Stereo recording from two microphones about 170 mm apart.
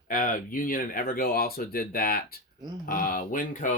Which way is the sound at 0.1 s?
55° left (ahead or behind).